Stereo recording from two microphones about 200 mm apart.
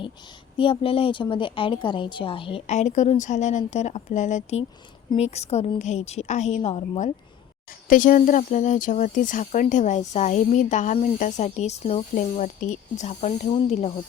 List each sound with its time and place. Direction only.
0.5 s a woman's voice: 25° left (ahead or behind)
7.9 s speech: 40° left (ahead or behind)